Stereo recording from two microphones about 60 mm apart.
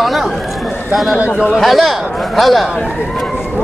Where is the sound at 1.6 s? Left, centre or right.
Centre.